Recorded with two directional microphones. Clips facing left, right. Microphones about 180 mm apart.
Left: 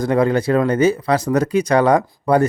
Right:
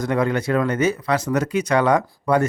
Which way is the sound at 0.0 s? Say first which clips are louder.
Left 5 dB; 30° left (ahead or behind).